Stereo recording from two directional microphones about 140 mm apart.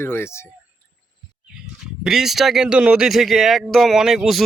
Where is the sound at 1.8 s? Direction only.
5° right (ahead or behind).